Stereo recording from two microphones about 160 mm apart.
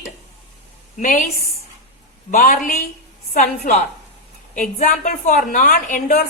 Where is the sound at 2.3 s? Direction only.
55° left (ahead or behind).